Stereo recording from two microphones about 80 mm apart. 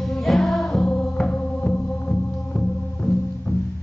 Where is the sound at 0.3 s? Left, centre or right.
Centre.